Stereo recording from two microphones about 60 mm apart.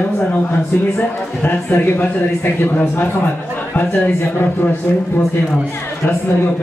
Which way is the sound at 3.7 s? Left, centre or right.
Left.